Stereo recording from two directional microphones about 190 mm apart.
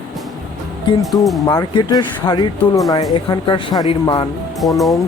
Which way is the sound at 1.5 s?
20° left (ahead or behind).